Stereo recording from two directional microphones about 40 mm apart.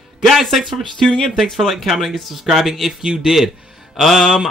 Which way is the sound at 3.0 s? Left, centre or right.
Centre.